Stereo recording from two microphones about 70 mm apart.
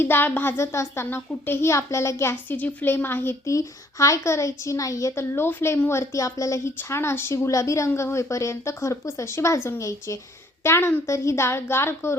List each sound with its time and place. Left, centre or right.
0.0 s a child's voice: left
2.3 s a woman's voice: left
3.4 s a woman's voice: left
5.1 s a child's voice: left
6.7 s a child's voice: left
7.5 s a woman's voice: left
10.6 s a child's voice: left